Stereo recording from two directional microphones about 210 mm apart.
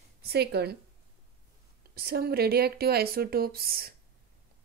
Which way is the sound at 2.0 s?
45° right (ahead or behind).